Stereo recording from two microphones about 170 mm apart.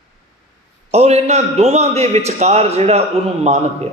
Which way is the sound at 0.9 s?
40° right (ahead or behind).